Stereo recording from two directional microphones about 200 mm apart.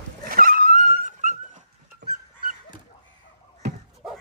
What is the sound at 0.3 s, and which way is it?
Dog, 45° right (ahead or behind).